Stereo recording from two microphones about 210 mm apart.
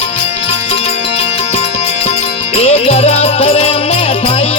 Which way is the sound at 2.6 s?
30° left (ahead or behind).